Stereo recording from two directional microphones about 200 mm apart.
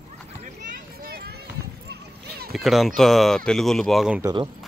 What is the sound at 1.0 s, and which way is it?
Run, 50° right (ahead or behind).